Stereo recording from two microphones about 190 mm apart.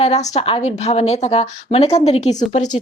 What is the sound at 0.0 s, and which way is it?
A woman's voice, 35° left (ahead or behind).